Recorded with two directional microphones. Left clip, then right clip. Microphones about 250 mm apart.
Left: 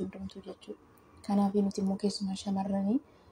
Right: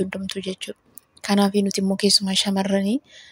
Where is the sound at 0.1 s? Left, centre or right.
Right.